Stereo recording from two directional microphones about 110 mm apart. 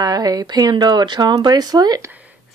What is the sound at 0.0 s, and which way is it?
Speech, 35° right (ahead or behind).